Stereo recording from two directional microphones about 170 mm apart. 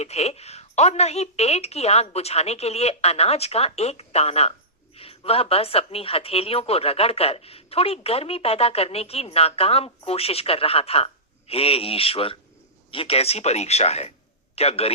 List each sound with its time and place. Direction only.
0.0 s a woman's voice: 40° left (ahead or behind)